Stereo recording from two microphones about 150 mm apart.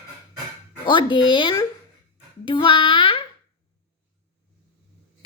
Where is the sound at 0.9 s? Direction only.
30° left (ahead or behind).